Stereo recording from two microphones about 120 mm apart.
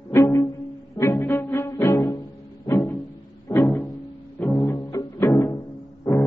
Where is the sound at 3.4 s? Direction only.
25° left (ahead or behind).